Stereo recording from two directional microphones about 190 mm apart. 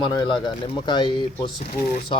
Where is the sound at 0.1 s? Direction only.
25° left (ahead or behind).